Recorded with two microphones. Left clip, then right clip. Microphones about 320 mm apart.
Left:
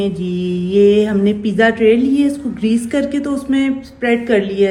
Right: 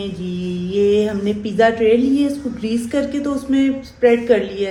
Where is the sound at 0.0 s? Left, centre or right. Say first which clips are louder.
Left 7 dB; left.